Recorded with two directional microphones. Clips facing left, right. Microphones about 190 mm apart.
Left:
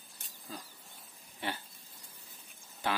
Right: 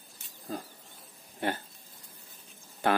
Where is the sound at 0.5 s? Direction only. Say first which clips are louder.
Right 9 dB; 45° right (ahead or behind).